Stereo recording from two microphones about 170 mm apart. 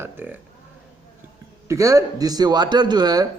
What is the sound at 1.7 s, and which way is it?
Speech, 20° right (ahead or behind).